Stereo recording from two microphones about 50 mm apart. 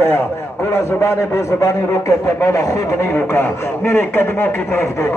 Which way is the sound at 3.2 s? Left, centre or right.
Left.